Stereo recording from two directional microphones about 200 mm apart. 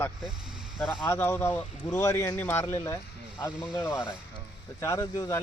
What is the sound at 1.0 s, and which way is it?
Speech, 10° left (ahead or behind).